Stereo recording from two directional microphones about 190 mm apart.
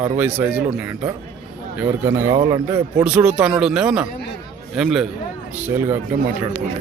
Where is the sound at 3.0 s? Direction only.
5° right (ahead or behind).